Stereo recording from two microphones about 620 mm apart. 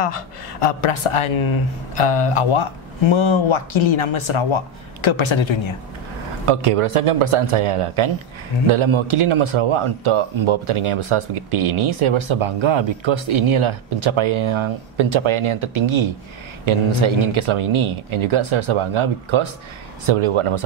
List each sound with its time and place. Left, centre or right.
0.0 s speech: left
6.4 s a man's voice: right